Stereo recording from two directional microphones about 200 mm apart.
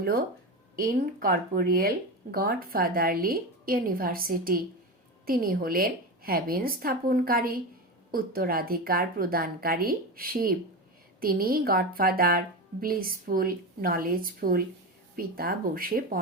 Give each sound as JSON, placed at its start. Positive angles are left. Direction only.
{"t": 0.0, "sound": "a woman's voice", "side_deg": -45}